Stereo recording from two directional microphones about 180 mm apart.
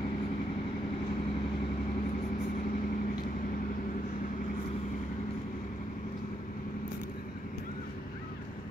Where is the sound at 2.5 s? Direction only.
50° left (ahead or behind).